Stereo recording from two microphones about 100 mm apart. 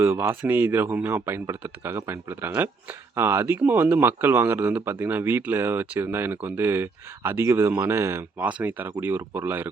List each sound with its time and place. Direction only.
0.0 s speech: 25° right (ahead or behind)
8.4 s speech: 15° right (ahead or behind)